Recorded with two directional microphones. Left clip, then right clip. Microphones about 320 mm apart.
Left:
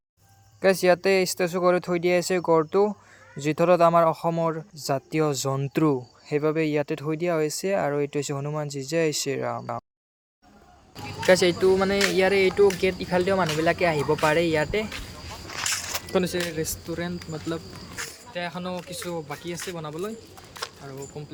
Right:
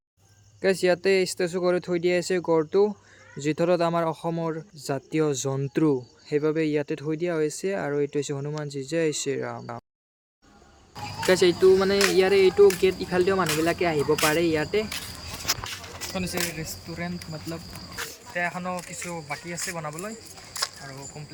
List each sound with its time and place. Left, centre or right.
0.6 s speech: centre
11.3 s speech: centre
18.0 s a sound: centre
18.3 s speech: centre